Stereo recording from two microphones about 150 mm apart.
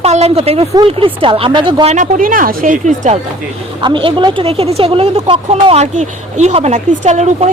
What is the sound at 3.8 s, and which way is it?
Speech, 35° right (ahead or behind).